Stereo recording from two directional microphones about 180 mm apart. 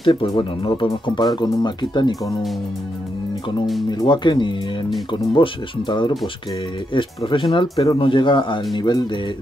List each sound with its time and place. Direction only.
0.0 s speech: 25° left (ahead or behind)
4.0 s speech: 25° left (ahead or behind)